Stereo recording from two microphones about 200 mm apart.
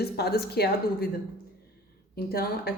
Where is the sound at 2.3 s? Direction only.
50° left (ahead or behind).